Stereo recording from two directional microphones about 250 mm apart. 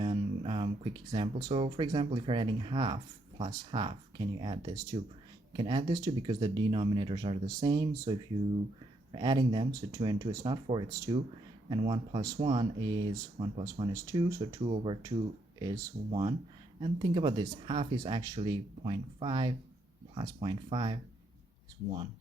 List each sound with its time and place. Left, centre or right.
0.0 s speech: centre